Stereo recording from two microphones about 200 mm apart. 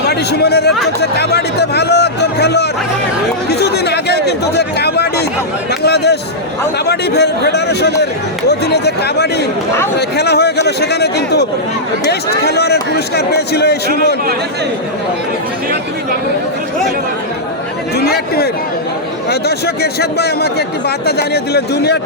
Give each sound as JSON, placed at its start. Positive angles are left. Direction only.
{"t": 0.1, "sound": "speech", "side_deg": 55}
{"t": 17.9, "sound": "speech", "side_deg": 50}